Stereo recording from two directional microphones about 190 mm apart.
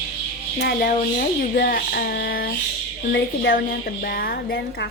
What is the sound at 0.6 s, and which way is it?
Speech, 50° left (ahead or behind).